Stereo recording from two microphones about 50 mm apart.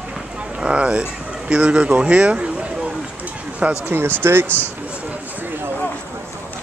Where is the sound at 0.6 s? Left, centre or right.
Right.